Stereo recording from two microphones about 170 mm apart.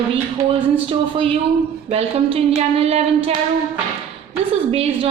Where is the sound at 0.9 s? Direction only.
30° right (ahead or behind).